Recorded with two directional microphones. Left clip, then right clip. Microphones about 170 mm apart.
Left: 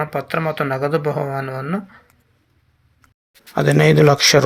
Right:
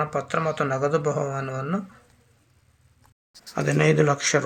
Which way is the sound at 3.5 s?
30° left (ahead or behind).